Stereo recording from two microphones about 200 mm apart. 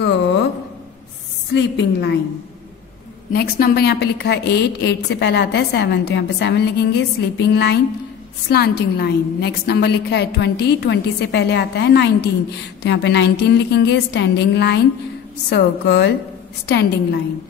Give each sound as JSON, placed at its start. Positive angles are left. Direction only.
{"t": 0.0, "sound": "a sound", "side_deg": 60}
{"t": 1.5, "sound": "a woman's voice", "side_deg": 60}
{"t": 3.3, "sound": "a woman's voice", "side_deg": 50}